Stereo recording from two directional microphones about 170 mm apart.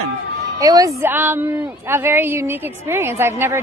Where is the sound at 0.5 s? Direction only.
20° right (ahead or behind).